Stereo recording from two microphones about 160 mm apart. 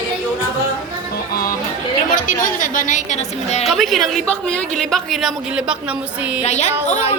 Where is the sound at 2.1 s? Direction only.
55° left (ahead or behind).